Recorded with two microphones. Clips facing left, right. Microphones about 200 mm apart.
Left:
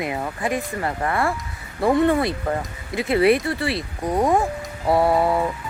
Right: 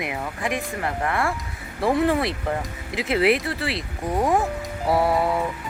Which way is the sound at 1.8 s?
Centre (ahead or behind).